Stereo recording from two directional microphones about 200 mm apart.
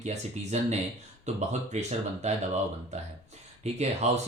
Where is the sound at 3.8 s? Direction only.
35° right (ahead or behind).